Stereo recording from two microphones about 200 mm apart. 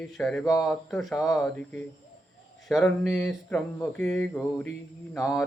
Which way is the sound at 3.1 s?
Centre (ahead or behind).